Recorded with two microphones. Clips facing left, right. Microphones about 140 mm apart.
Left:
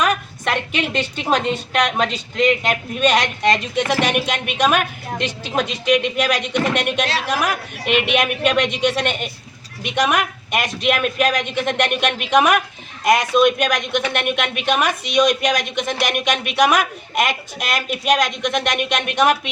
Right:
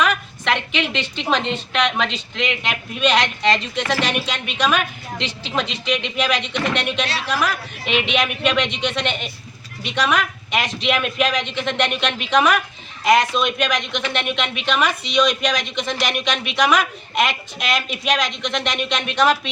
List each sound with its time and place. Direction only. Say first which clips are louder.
0.0 s a sound: left 1 dB; 45° left (ahead or behind)
1.3 s a woman's voice: left 2 dB; 45° left (ahead or behind)
13.4 s a woman's voice: left 5 dB; 50° left (ahead or behind)